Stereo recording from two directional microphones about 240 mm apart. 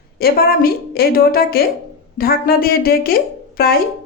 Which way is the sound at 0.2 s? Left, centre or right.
Left.